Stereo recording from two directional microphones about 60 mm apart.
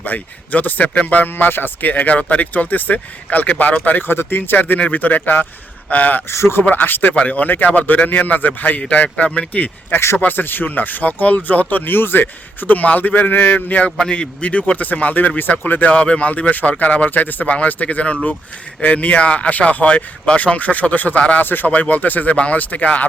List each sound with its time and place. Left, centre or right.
0.0 s speech: left
6.3 s speech: left
6.6 s speech: left
14.0 s speech: centre